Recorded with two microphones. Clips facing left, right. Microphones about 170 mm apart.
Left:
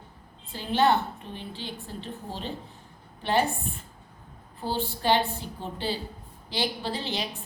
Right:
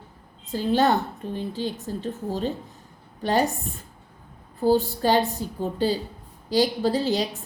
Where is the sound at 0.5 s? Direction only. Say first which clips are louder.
Right 3 dB; 40° right (ahead or behind).